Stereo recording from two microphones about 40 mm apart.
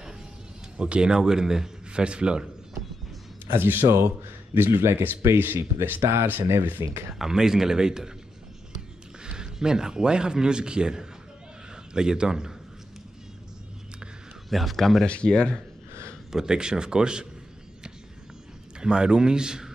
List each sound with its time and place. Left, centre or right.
0.7 s a man's voice: right
1.9 s a man's voice: right
3.4 s speech: right
7.2 s a man's voice: centre
9.2 s a man's voice: centre
14.5 s speech: centre
15.0 s speech: left
16.3 s a man's voice: centre
18.8 s a man's voice: centre